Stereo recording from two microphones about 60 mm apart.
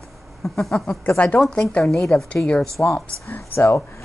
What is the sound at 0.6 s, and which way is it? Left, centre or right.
Speech, centre.